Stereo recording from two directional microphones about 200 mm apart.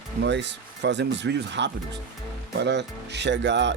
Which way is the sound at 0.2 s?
60° right (ahead or behind).